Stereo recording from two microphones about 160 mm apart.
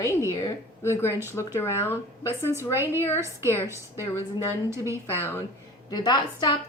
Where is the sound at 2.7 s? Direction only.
15° right (ahead or behind).